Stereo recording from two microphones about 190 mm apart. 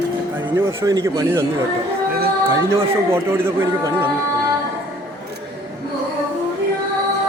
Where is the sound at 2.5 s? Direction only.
15° right (ahead or behind).